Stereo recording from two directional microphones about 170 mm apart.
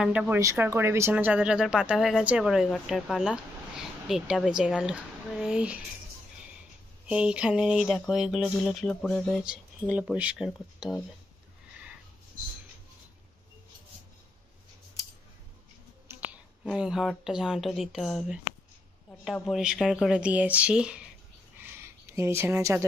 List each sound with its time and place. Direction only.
0.0 s speech: 5° right (ahead or behind)
7.1 s speech: 5° right (ahead or behind)
16.1 s speech: 10° right (ahead or behind)
21.5 s a sound: 15° right (ahead or behind)